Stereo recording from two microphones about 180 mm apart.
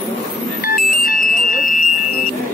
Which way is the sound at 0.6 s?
55° left (ahead or behind).